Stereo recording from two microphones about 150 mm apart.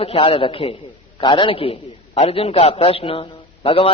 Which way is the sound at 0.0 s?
40° left (ahead or behind).